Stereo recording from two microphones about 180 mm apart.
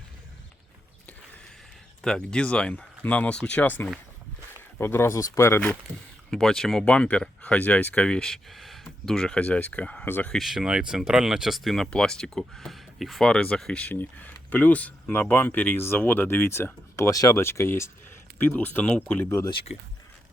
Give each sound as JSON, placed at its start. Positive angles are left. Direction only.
{"t": 2.0, "sound": "speech", "side_deg": 5}
{"t": 19.5, "sound": "speech", "side_deg": 30}